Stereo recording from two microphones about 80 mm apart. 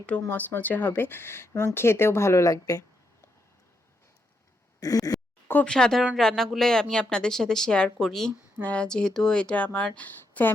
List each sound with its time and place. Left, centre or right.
0.3 s speech: left
4.8 s a sound: left
5.6 s a woman's voice: centre